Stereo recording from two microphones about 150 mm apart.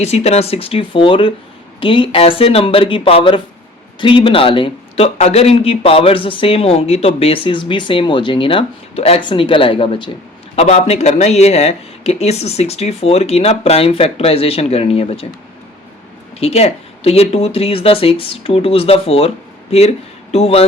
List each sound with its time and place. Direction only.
0.0 s speech: 45° left (ahead or behind)
16.4 s speech: 45° left (ahead or behind)
20.3 s speech: 40° left (ahead or behind)